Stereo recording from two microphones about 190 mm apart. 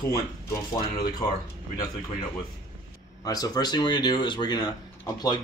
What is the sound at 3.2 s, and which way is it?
Speech, 20° left (ahead or behind).